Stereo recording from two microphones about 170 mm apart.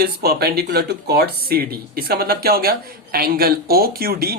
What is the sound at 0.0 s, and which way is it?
Speech, 65° right (ahead or behind).